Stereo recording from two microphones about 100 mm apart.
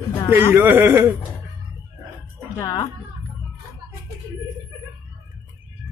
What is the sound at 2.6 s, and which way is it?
Speech, 40° left (ahead or behind).